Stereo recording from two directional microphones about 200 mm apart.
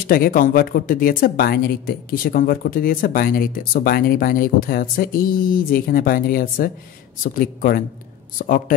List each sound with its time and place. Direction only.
0.0 s speech: 45° left (ahead or behind)